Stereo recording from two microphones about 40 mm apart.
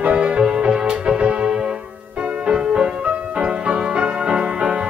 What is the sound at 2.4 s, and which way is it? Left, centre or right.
Music, centre.